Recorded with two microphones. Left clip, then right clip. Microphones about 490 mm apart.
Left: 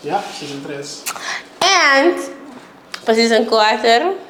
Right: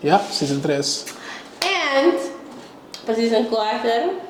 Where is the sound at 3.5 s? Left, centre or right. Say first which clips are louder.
Left 8 dB; left.